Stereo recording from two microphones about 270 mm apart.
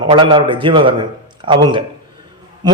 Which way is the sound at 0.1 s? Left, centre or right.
Centre.